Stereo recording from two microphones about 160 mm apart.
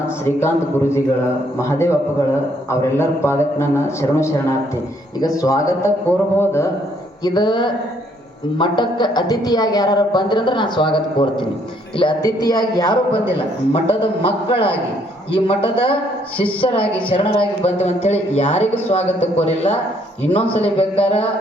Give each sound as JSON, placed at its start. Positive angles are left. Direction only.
{"t": 0.3, "sound": "a man's voice", "side_deg": 15}
{"t": 7.3, "sound": "a man's voice", "side_deg": 25}
{"t": 14.0, "sound": "a man's voice", "side_deg": 35}